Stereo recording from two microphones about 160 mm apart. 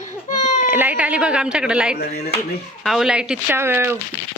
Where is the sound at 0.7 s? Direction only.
10° right (ahead or behind).